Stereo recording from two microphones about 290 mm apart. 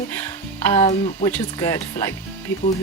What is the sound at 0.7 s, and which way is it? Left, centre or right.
Speech, centre.